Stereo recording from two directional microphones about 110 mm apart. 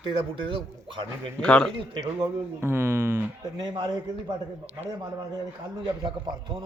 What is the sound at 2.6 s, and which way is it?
Speech, 20° right (ahead or behind).